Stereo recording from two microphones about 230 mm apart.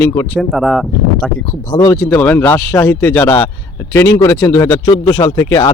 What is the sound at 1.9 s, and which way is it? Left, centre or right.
Speech, centre.